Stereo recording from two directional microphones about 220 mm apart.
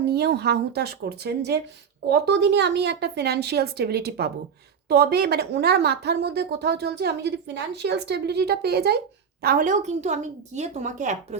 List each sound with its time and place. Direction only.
0.1 s a woman's voice: 45° right (ahead or behind)